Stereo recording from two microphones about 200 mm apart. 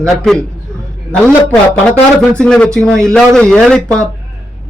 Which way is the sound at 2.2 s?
5° left (ahead or behind).